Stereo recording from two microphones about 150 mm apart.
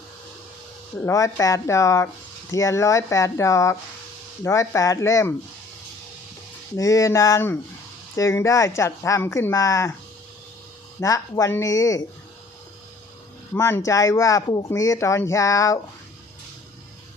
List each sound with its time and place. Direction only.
0.9 s speech: 20° left (ahead or behind)
6.7 s speech: 20° left (ahead or behind)
11.0 s speech: 20° left (ahead or behind)
13.5 s speech: 15° left (ahead or behind)